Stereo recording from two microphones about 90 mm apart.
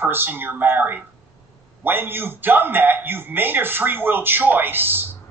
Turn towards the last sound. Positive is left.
turn(degrees=-25)  # may be behind; listen again after turning